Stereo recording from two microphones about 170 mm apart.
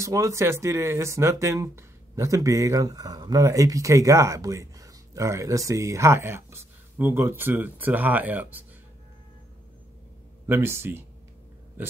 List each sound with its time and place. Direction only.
0.0 s speech: 15° right (ahead or behind)
10.4 s speech: 15° right (ahead or behind)